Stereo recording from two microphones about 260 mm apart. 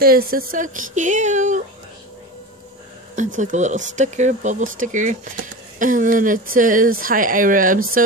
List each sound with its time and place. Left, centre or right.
0.0 s speech: right
3.2 s speech: right